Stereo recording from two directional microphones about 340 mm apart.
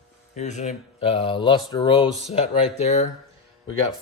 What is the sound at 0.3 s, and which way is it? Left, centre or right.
Speech, centre.